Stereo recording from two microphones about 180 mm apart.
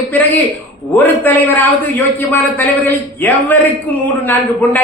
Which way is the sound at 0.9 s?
10° left (ahead or behind).